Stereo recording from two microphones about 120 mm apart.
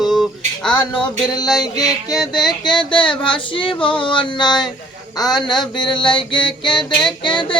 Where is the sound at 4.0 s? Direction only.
40° left (ahead or behind).